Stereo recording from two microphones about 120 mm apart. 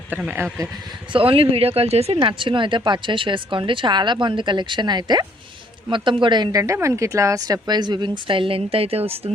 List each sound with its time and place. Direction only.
0.3 s speech: 20° right (ahead or behind)
1.1 s speech: 50° right (ahead or behind)
2.1 s speech: 45° right (ahead or behind)